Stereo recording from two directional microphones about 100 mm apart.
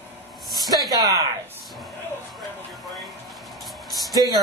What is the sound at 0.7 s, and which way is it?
Speech, 40° right (ahead or behind).